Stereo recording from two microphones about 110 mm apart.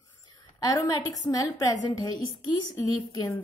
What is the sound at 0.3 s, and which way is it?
A woman's voice, 35° left (ahead or behind).